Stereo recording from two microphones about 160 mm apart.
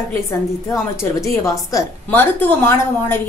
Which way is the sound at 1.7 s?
15° left (ahead or behind).